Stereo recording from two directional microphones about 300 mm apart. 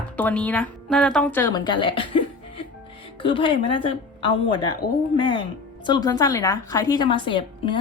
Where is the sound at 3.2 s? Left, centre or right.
Centre.